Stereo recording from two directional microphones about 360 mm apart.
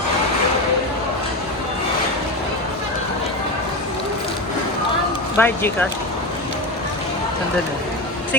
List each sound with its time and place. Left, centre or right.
5.4 s speech: centre